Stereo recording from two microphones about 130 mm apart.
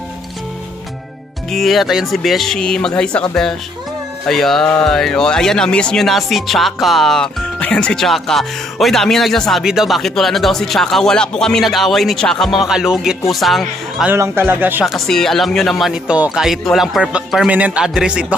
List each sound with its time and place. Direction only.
1.5 s speech: centre (ahead or behind)
14.1 s speech: 20° right (ahead or behind)
14.9 s speech: centre (ahead or behind)